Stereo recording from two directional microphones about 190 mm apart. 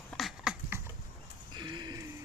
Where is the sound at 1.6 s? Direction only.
25° right (ahead or behind).